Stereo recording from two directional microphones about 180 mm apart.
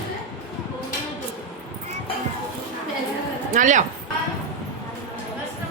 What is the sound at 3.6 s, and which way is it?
Speech, 45° right (ahead or behind).